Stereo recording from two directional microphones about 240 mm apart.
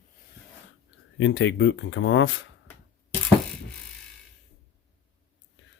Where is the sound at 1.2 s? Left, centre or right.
Left.